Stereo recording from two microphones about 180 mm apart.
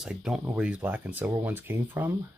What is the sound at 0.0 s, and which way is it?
Speech, 5° right (ahead or behind).